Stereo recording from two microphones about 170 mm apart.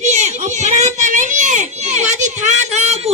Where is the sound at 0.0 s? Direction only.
40° right (ahead or behind).